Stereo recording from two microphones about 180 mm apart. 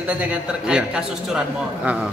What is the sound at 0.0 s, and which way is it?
Speech, 5° right (ahead or behind).